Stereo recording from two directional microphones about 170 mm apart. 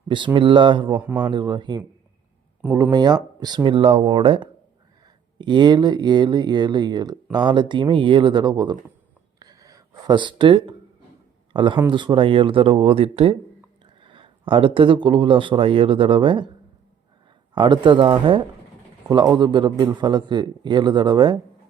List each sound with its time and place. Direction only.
0.3 s speech: 30° right (ahead or behind)
0.9 s a man's voice: 10° right (ahead or behind)
1.2 s a man's voice: 25° right (ahead or behind)
9.4 s a sound: 20° right (ahead or behind)
11.5 s a man's voice: 30° right (ahead or behind)
17.5 s speech: 30° right (ahead or behind)